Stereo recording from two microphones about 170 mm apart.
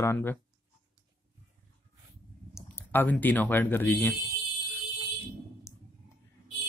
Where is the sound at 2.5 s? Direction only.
10° left (ahead or behind).